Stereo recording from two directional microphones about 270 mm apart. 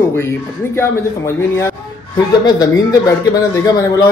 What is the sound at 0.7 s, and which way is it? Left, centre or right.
Speech, centre.